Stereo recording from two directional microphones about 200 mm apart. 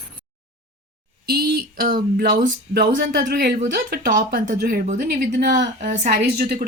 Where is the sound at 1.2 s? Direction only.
50° right (ahead or behind).